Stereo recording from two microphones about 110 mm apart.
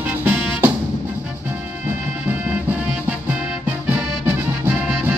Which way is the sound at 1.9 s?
15° right (ahead or behind).